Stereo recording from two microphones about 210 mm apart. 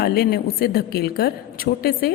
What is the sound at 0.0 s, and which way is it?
A woman's voice, 45° left (ahead or behind).